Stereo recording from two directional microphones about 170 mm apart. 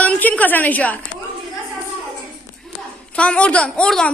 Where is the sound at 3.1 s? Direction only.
5° left (ahead or behind).